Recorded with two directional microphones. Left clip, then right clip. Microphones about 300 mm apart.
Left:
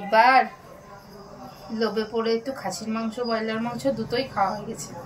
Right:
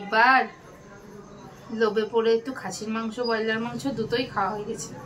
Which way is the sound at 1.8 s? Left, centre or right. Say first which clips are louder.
Right 3 dB; centre.